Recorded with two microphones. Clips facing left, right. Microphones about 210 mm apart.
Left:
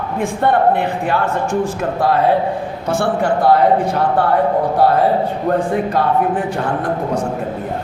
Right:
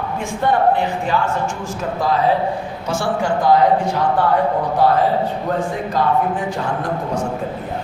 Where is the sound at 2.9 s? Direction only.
60° left (ahead or behind).